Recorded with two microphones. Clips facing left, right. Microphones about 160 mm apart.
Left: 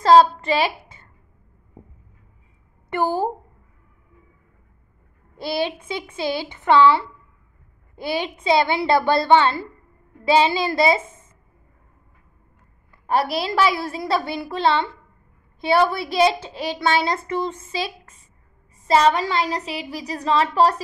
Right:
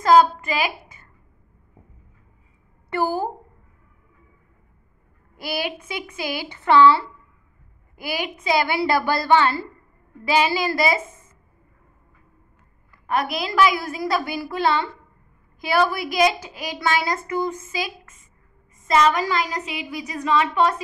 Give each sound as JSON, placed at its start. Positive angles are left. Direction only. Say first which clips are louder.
{"t": 0.0, "sound": "a woman's voice", "louder": "left 2 dB", "side_deg": 30}
{"t": 2.9, "sound": "a woman's voice", "louder": "left 1 dB", "side_deg": 25}
{"t": 5.4, "sound": "a woman's voice", "louder": "left 3 dB", "side_deg": 25}
{"t": 13.0, "sound": "a woman's voice", "louder": "left 3 dB", "side_deg": 30}